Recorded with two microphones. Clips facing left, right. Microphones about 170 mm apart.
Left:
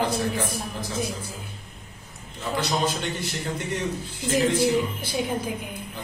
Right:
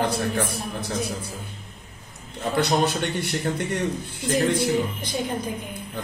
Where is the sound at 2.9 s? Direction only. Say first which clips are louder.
Right 2 dB; 60° right (ahead or behind).